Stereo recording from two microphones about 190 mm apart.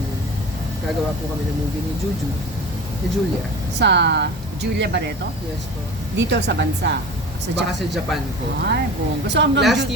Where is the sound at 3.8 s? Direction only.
65° right (ahead or behind).